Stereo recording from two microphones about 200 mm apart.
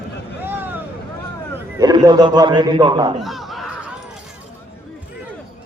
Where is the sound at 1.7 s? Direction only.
20° right (ahead or behind).